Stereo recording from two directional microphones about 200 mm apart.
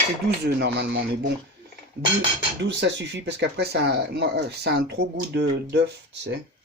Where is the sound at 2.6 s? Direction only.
60° right (ahead or behind).